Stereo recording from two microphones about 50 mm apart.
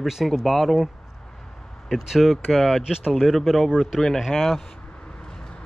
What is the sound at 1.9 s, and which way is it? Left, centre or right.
Speech, centre.